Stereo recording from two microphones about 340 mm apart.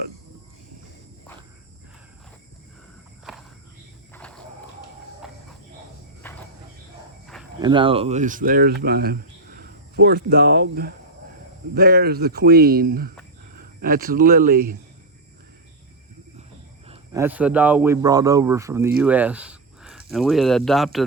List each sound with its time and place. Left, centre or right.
4.1 s a sound: centre
5.2 s cricket: centre
7.6 s speech: centre
16.8 s speech: centre